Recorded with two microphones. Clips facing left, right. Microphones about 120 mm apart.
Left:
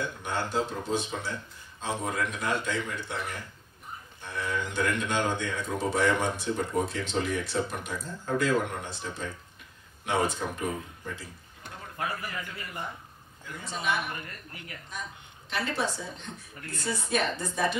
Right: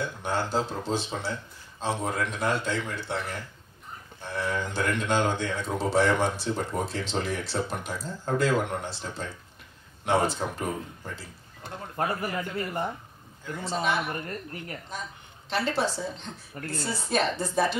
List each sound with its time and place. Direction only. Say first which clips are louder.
0.0 s speech: right 3 dB; 30° right (ahead or behind)
4.2 s speech: right 3 dB; 30° right (ahead or behind)
13.7 s speech: right 3 dB; 30° right (ahead or behind)